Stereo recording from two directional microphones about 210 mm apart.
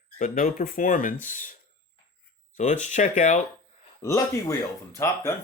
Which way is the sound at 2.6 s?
35° left (ahead or behind).